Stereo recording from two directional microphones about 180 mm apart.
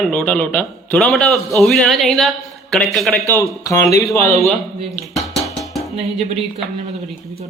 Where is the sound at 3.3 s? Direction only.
15° left (ahead or behind).